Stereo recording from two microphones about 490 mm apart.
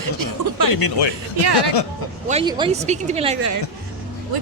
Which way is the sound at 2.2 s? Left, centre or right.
Centre.